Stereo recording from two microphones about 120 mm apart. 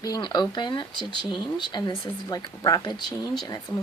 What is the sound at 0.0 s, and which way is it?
Speech, 35° left (ahead or behind).